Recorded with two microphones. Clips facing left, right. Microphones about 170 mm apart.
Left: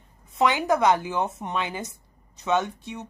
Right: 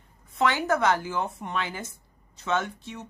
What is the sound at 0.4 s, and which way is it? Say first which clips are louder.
A woman's voice: left 3 dB; 15° left (ahead or behind).